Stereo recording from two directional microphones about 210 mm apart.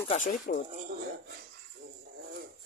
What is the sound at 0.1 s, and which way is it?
Speech, 40° left (ahead or behind).